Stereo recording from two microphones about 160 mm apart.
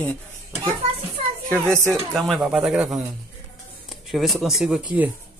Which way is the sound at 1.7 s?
15° right (ahead or behind).